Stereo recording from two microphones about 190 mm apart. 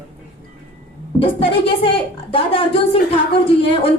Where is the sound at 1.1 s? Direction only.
30° left (ahead or behind).